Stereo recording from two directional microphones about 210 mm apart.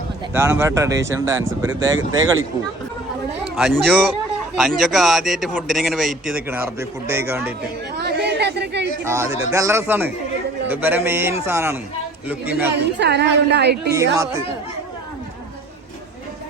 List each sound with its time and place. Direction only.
0.3 s a man's voice: 10° right (ahead or behind)
3.4 s a man's voice: 5° right (ahead or behind)
7.9 s chatter: 50° right (ahead or behind)
9.0 s a man's voice: 10° right (ahead or behind)
12.7 s a woman's voice: 55° right (ahead or behind)
13.9 s a man's voice: 15° right (ahead or behind)